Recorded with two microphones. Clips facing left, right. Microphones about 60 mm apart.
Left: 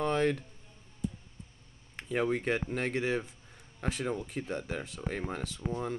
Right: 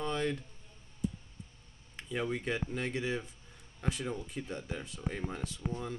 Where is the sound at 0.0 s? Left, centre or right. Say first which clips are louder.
Left 5 dB; left.